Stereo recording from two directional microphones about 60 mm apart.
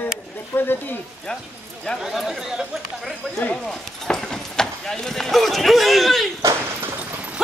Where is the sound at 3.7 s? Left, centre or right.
Centre.